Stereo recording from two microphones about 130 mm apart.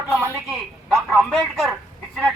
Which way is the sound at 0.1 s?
20° right (ahead or behind).